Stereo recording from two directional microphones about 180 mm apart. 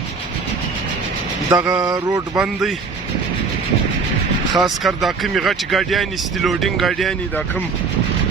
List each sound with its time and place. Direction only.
1.5 s mantra: 15° right (ahead or behind)
2.4 s speech: centre (ahead or behind)
4.5 s speech: centre (ahead or behind)